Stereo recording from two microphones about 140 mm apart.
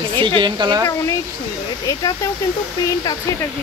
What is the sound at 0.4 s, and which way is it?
Speech, 30° right (ahead or behind).